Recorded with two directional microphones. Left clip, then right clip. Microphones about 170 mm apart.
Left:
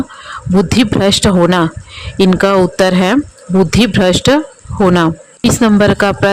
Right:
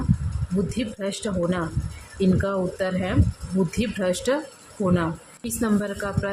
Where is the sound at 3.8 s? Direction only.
60° left (ahead or behind).